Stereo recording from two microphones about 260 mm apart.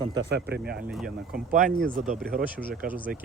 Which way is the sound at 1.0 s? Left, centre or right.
Right.